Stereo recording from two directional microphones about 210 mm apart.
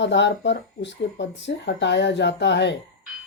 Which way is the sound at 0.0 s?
55° left (ahead or behind).